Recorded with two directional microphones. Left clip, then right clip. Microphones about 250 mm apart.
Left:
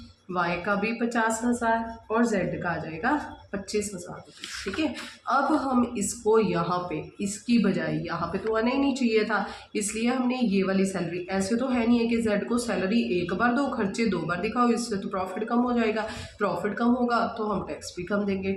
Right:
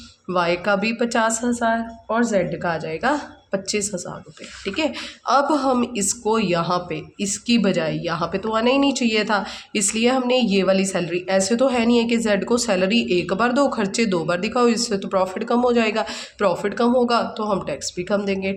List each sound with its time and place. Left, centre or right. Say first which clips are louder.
0.3 s speech: right 7 dB; right
4.8 s speech: right 8 dB; right